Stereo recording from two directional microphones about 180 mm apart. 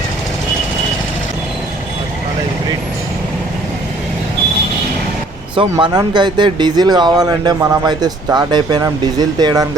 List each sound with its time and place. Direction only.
5.5 s speech: 25° right (ahead or behind)